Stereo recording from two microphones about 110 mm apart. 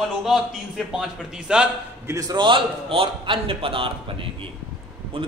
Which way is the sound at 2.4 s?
50° right (ahead or behind).